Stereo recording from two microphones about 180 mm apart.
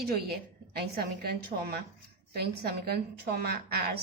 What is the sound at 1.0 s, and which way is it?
A woman's voice, 60° right (ahead or behind).